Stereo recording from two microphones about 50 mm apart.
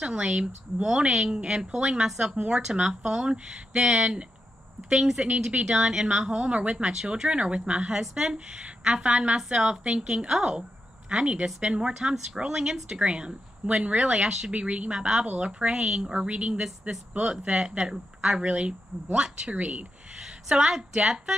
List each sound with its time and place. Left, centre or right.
0.0 s a woman's voice: centre
19.5 s speech: right
20.2 s a woman's voice: centre